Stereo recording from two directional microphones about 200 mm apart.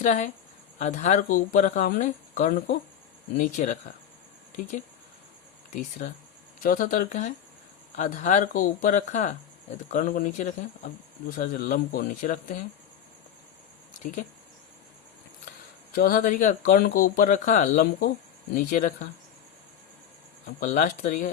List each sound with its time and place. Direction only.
0.0 s speech: 35° left (ahead or behind)
6.0 s speech: 40° left (ahead or behind)
14.0 s speech: 40° left (ahead or behind)
15.9 s speech: 45° left (ahead or behind)
20.6 s speech: 40° left (ahead or behind)